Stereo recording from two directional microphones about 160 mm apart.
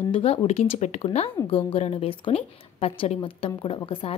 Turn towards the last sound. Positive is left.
turn(degrees=35)  # may be behind; listen again after turning